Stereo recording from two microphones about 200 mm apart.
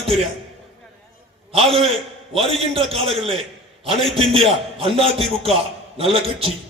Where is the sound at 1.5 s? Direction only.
30° right (ahead or behind).